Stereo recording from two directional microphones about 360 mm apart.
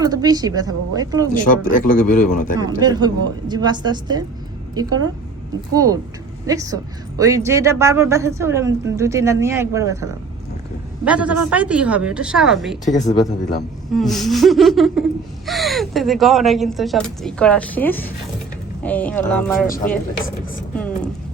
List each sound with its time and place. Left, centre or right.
0.0 s a woman's voice: centre
1.3 s a man's voice: left
2.6 s a woman's voice: centre
5.7 s a woman's voice: centre
13.9 s speech: centre
19.6 s a man's voice: left
20.7 s speech: centre